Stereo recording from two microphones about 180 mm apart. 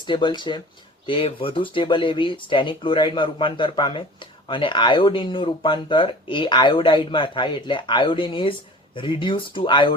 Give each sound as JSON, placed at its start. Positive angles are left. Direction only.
{"t": 0.0, "sound": "speech", "side_deg": 25}